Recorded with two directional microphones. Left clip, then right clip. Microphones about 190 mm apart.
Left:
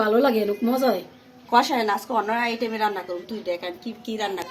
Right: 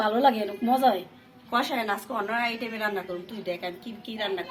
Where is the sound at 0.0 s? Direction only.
45° left (ahead or behind).